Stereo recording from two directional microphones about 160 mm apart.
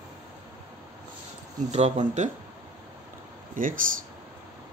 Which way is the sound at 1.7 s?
45° right (ahead or behind).